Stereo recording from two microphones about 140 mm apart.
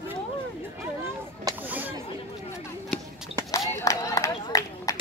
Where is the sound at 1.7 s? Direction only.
10° right (ahead or behind).